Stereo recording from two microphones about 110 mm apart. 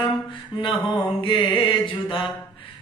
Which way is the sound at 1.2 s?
50° left (ahead or behind).